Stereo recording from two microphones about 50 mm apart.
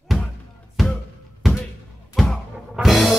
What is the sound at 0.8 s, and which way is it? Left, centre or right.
Music, centre.